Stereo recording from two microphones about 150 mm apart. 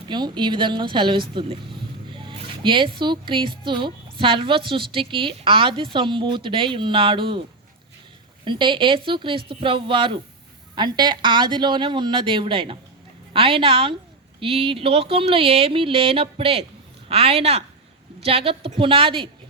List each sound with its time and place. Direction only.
0.1 s speech: 30° right (ahead or behind)
8.4 s speech: 35° right (ahead or behind)